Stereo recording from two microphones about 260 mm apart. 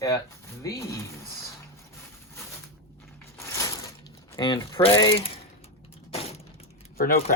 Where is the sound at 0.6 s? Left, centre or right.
Centre.